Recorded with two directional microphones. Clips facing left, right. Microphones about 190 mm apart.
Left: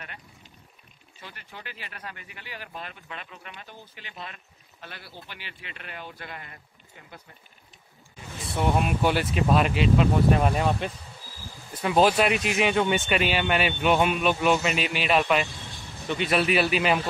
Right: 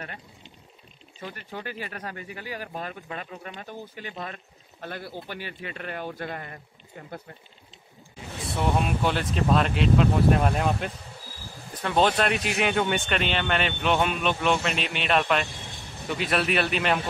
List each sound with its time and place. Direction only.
1.2 s speech: 45° right (ahead or behind)
8.5 s speech: 5° left (ahead or behind)